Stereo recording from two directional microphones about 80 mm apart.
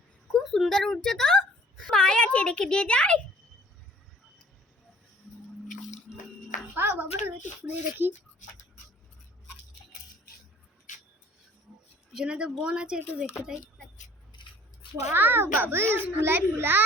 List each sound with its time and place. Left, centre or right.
0.5 s a woman's voice: centre
6.7 s a child's voice: right
12.1 s speech: centre
15.1 s a child's voice: right